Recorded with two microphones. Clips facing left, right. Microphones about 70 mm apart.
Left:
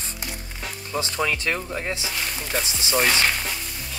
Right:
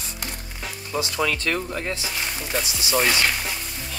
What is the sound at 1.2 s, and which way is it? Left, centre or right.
Speech, centre.